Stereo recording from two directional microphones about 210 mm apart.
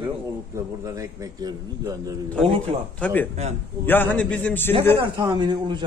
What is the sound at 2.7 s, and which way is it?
Speech, 30° right (ahead or behind).